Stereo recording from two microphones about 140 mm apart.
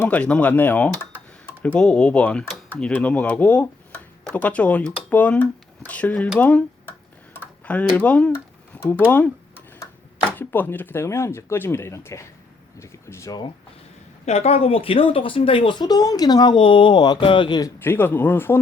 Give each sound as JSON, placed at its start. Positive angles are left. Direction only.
{"t": 0.0, "sound": "speech", "side_deg": 10}
{"t": 10.3, "sound": "speech", "side_deg": 15}
{"t": 14.3, "sound": "speech", "side_deg": 50}
{"t": 17.8, "sound": "speech", "side_deg": 15}